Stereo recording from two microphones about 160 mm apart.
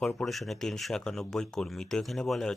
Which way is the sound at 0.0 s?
5° left (ahead or behind).